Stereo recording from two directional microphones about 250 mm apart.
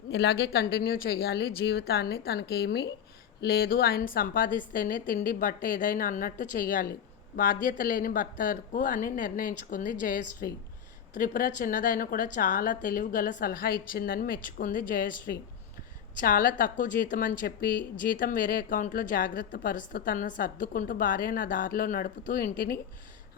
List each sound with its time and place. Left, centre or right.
0.1 s a woman's voice: left